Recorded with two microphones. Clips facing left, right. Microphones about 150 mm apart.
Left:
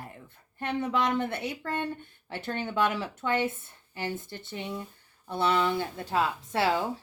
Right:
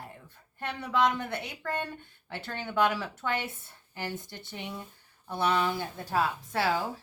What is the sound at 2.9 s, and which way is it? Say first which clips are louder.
Speech: left 3 dB; 20° left (ahead or behind).